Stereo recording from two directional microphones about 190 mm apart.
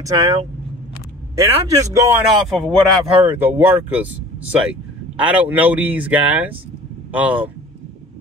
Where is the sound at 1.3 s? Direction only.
15° right (ahead or behind).